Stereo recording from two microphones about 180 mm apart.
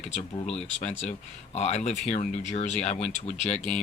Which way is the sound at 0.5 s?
40° left (ahead or behind).